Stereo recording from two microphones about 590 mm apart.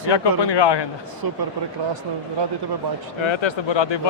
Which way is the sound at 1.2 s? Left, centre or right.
Right.